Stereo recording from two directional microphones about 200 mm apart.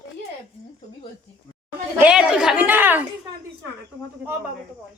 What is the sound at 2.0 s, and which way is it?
A woman's voice, 5° right (ahead or behind).